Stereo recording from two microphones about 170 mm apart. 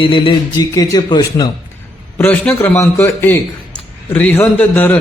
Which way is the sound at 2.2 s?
10° left (ahead or behind).